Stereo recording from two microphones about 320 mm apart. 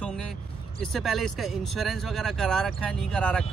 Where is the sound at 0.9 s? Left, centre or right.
Centre.